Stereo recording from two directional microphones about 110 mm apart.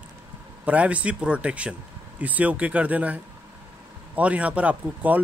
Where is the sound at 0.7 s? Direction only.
10° right (ahead or behind).